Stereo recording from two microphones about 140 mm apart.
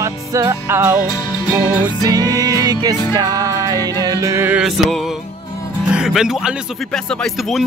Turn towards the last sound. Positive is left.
turn(degrees=0)  # may be behind; listen again after turning